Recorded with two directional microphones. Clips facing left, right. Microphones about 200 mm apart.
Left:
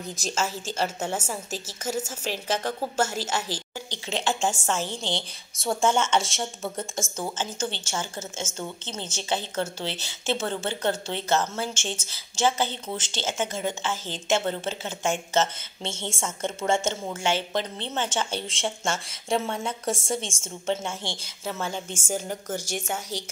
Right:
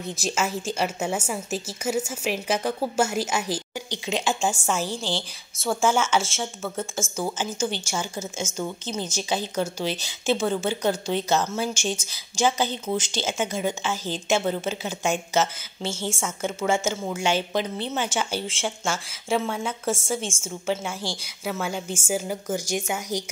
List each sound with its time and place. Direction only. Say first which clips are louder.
0.2 s a woman's voice: right 3 dB; 10° right (ahead or behind)